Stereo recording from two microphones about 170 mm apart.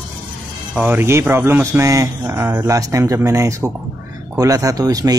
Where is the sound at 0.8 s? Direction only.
15° right (ahead or behind).